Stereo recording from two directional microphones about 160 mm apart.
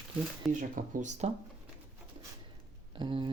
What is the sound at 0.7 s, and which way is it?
Speech, 55° right (ahead or behind).